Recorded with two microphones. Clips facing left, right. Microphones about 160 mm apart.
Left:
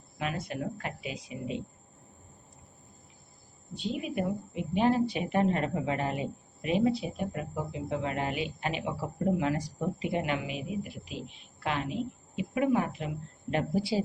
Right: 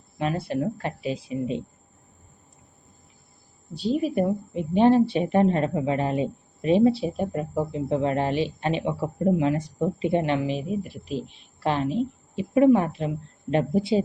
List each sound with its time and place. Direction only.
0.2 s speech: 35° right (ahead or behind)
3.8 s a woman's voice: 35° right (ahead or behind)